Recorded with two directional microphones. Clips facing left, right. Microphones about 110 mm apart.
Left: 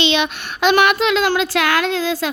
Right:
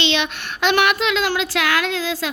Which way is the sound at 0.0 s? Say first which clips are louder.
Left 3 dB; 15° left (ahead or behind).